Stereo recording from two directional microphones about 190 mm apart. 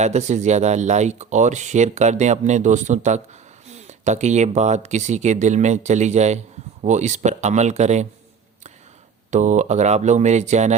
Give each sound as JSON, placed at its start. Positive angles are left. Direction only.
{"t": 0.0, "sound": "speech", "side_deg": -35}
{"t": 9.3, "sound": "speech", "side_deg": -40}